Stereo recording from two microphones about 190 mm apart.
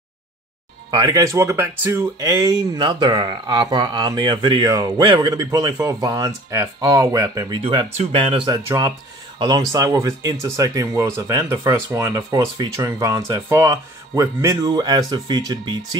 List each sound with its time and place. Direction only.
0.9 s speech: 15° right (ahead or behind)
8.5 s speech: 20° right (ahead or behind)